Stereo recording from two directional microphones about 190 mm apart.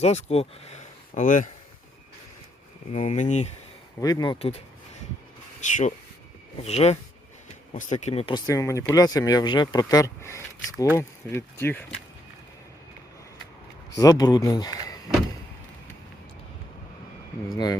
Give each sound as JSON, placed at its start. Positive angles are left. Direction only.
{"t": 0.0, "sound": "speech", "side_deg": 35}
{"t": 2.9, "sound": "speech", "side_deg": 40}
{"t": 4.0, "sound": "speech", "side_deg": 20}
{"t": 13.9, "sound": "speech", "side_deg": 20}